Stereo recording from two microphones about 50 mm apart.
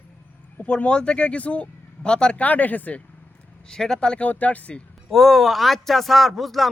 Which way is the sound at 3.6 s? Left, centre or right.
Centre.